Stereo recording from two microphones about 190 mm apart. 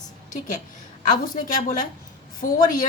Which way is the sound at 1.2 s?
45° left (ahead or behind).